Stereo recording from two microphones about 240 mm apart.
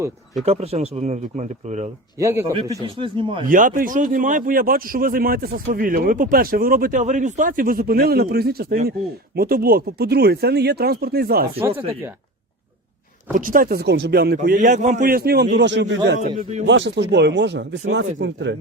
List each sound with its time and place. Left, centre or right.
0.4 s speech: right
2.1 s a man's voice: centre
3.5 s speech: right
13.3 s speech: right
16.2 s speech: right
16.6 s speech: right